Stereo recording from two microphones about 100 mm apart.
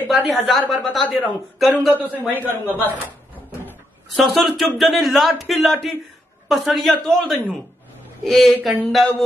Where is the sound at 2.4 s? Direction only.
20° left (ahead or behind).